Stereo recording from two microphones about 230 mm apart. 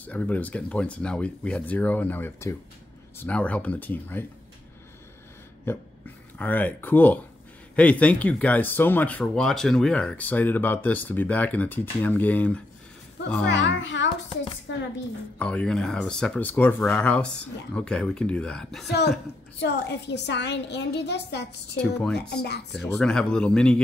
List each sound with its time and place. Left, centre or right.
0.0 s speech: centre
5.7 s speech: centre
13.5 s a woman's voice: left
15.3 s speech: centre
18.9 s a woman's voice: left
22.7 s speech: centre